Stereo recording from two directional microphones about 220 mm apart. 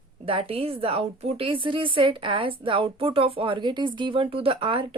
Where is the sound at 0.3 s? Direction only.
25° right (ahead or behind).